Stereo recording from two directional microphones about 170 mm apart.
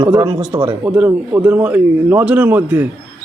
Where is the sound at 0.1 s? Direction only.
20° right (ahead or behind).